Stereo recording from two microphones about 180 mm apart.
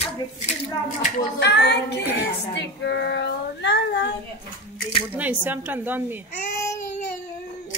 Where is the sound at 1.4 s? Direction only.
70° left (ahead or behind).